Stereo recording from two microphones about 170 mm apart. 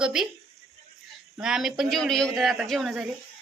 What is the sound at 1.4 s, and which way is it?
A man's voice, 5° right (ahead or behind).